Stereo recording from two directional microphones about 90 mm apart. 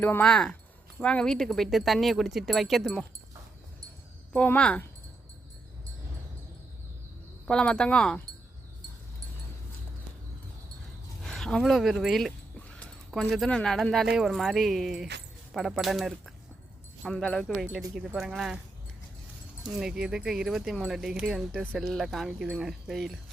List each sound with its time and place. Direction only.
0.0 s speech: 20° left (ahead or behind)
0.3 s speech: 5° left (ahead or behind)
4.3 s speech: 15° left (ahead or behind)
7.4 s speech: 10° left (ahead or behind)
11.2 s speech: 5° left (ahead or behind)
12.5 s a sound: 15° left (ahead or behind)
13.1 s speech: centre (ahead or behind)
19.8 s speech: 10° right (ahead or behind)